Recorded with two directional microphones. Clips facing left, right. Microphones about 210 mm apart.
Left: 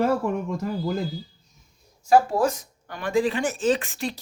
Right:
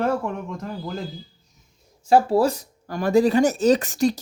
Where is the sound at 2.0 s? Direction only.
30° right (ahead or behind).